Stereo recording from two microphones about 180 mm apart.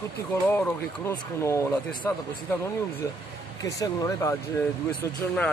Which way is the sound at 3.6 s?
20° left (ahead or behind).